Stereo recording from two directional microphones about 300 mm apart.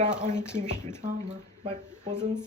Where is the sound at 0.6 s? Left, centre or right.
Centre.